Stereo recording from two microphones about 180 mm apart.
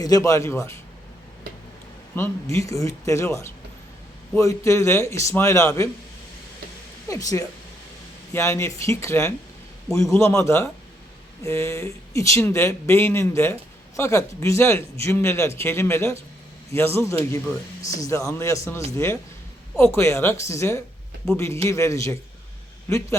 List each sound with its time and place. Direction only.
0.0 s speech: 20° left (ahead or behind)
2.1 s speech: 15° left (ahead or behind)
7.1 s speech: 20° left (ahead or behind)